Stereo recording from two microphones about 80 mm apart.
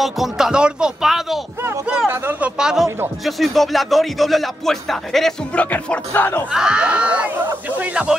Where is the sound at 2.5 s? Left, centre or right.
Centre.